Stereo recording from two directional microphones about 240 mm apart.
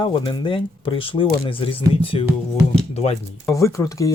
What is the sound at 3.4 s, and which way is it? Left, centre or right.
Speech, centre.